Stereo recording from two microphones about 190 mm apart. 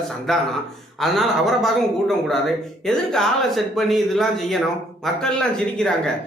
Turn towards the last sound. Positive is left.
turn(degrees=5)  # may be behind; listen again after turning